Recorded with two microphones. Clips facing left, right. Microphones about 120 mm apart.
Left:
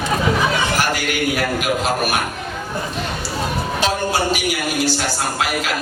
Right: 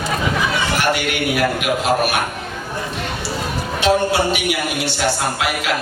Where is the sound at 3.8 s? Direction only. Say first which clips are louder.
Right 5 dB; 40° left (ahead or behind).